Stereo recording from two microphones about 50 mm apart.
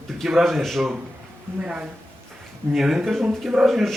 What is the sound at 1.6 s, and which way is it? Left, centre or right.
A man's voice, centre.